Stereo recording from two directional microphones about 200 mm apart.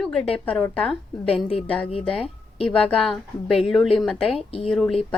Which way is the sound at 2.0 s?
5° left (ahead or behind).